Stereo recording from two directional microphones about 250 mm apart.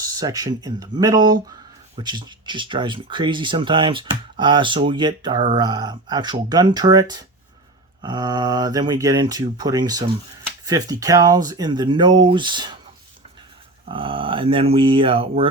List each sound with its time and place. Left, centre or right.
0.0 s speech: centre
13.8 s speech: centre